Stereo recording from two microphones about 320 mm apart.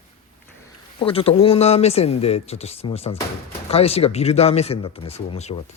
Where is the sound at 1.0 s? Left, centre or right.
Centre.